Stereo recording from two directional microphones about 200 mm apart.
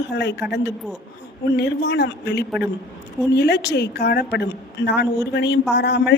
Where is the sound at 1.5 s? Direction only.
60° left (ahead or behind).